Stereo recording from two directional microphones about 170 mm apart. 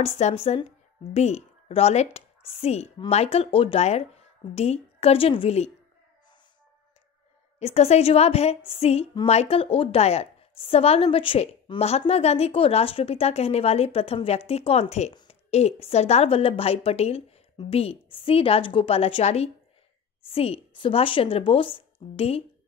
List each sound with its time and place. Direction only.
0.0 s a woman's voice: 35° left (ahead or behind)
7.5 s a woman's voice: 40° left (ahead or behind)